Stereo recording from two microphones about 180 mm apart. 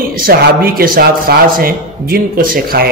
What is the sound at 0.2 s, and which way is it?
A man's voice, 55° right (ahead or behind).